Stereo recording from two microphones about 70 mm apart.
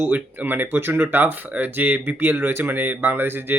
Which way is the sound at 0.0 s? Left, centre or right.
Right.